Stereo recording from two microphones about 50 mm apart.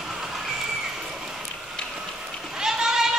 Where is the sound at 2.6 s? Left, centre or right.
Centre.